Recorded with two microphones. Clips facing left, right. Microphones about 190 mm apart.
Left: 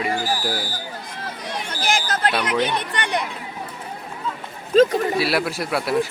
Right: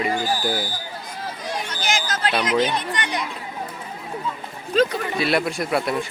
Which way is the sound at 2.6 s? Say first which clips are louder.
Even; 60° left (ahead or behind).